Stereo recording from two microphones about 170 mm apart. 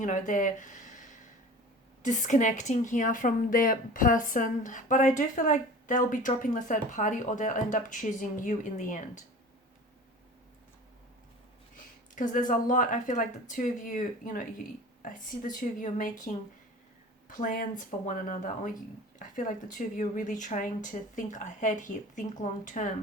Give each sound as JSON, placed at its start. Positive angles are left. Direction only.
{"t": 0.0, "sound": "speech", "side_deg": 50}
{"t": 12.1, "sound": "speech", "side_deg": 50}